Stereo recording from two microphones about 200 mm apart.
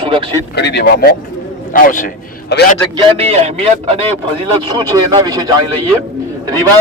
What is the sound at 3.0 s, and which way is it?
Speech, 30° right (ahead or behind).